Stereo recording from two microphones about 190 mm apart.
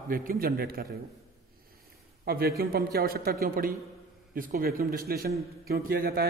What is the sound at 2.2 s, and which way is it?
A man's voice, 55° right (ahead or behind).